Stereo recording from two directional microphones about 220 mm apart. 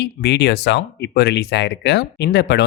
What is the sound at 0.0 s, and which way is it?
Speech, 50° left (ahead or behind).